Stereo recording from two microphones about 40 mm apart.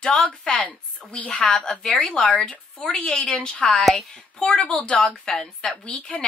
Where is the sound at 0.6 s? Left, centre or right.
Left.